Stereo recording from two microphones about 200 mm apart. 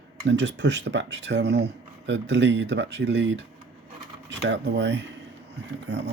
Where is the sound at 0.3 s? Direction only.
60° right (ahead or behind).